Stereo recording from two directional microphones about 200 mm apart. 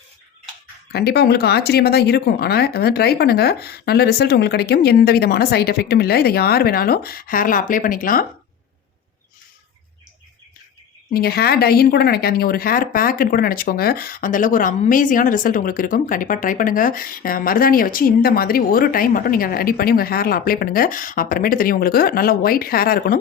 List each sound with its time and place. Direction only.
0.9 s speech: 55° left (ahead or behind)
11.1 s speech: 50° left (ahead or behind)